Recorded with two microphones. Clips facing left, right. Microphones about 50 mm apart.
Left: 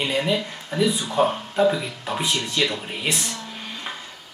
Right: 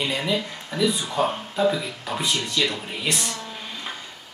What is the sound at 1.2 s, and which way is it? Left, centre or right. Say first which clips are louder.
Speech: left 3 dB; centre.